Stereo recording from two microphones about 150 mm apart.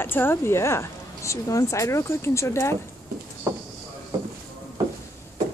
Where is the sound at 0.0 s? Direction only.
15° left (ahead or behind).